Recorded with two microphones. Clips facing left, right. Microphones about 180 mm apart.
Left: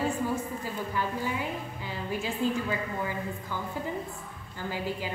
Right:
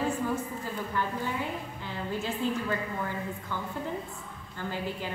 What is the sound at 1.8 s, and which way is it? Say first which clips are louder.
A woman's voice: even; 10° left (ahead or behind).